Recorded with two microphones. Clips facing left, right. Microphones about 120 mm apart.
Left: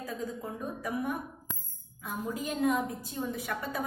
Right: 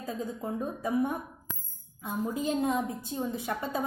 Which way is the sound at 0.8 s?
25° right (ahead or behind).